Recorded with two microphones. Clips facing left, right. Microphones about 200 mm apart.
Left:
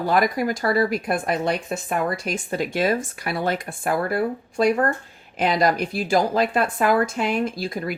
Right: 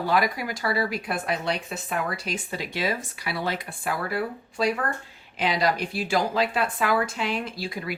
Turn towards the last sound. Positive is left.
turn(degrees=45)  # may be behind; listen again after turning